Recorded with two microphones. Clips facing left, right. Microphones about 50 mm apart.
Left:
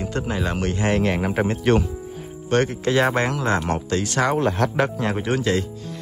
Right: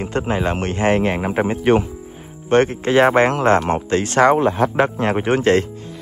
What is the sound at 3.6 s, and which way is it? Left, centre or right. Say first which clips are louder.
Speech: right 4 dB; right.